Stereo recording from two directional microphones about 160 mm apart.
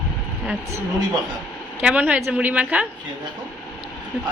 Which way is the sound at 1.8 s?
10° right (ahead or behind).